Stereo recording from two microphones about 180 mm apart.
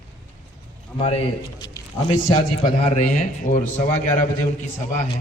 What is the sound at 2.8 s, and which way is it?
A man's voice, 40° left (ahead or behind).